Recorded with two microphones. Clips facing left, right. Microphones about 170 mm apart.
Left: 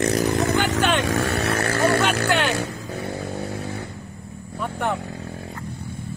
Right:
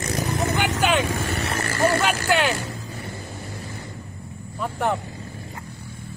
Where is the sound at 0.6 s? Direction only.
10° right (ahead or behind).